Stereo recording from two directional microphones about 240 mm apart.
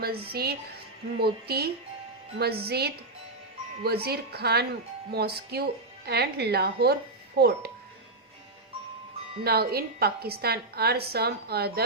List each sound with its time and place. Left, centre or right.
0.3 s a woman's voice: right
9.4 s a woman's voice: right